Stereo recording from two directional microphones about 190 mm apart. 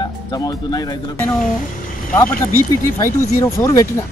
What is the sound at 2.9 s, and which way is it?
Speech, 20° left (ahead or behind).